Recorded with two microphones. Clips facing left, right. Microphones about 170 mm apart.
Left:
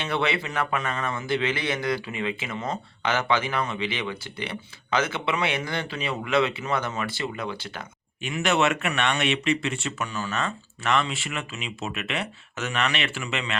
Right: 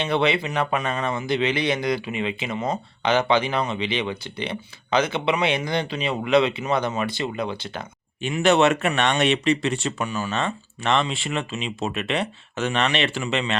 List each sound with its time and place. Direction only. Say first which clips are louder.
0.0 s speech: right 5 dB; 20° right (ahead or behind)
8.2 s speech: right 5 dB; 30° right (ahead or behind)
10.1 s speech: right 4 dB; 15° right (ahead or behind)
10.3 s speech: right 3 dB; 30° right (ahead or behind)